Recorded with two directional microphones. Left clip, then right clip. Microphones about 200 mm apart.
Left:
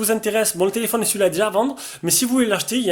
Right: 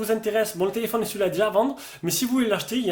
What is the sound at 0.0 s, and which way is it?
A man's voice, 30° left (ahead or behind).